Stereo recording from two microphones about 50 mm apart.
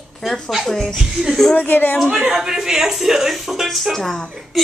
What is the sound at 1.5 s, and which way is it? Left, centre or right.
Speech, left.